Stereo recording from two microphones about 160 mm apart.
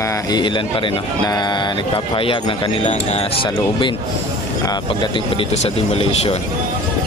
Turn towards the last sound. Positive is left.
turn(degrees=40)  # may be behind; listen again after turning